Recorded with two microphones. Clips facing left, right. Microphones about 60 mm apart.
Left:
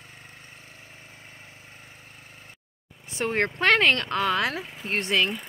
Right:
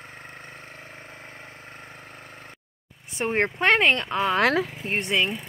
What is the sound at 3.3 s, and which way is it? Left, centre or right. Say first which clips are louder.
Speech: right 1 dB; centre.